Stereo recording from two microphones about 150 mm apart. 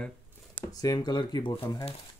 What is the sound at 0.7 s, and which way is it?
Speech, 25° left (ahead or behind).